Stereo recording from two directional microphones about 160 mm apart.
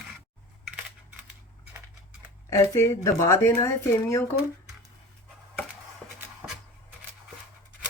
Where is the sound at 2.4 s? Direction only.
15° left (ahead or behind).